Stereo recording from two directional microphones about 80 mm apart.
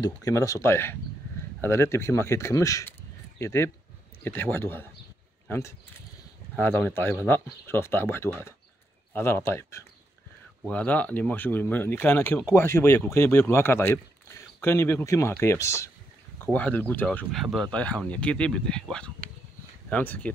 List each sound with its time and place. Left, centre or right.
0.2 s speech: left
6.6 s speech: left
10.7 s speech: centre; by 15.9 s left
16.5 s speech: left
17.3 s speech: centre
17.6 s speech: centre